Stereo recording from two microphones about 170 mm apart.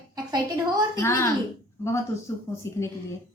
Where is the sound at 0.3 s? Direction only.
25° right (ahead or behind).